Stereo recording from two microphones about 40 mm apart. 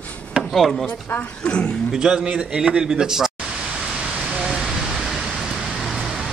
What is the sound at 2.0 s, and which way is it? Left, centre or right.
A man's voice, right.